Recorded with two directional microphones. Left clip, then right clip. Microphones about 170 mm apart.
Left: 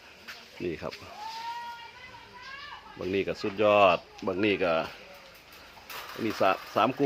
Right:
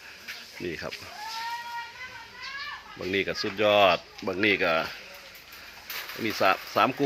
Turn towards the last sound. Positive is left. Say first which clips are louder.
# right 2 dB
turn(degrees=0)  # may be behind; listen again after turning